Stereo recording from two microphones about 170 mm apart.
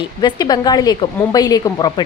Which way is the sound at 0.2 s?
25° left (ahead or behind).